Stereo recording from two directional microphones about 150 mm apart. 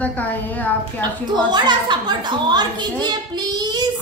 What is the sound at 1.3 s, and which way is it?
A woman's voice, 30° right (ahead or behind).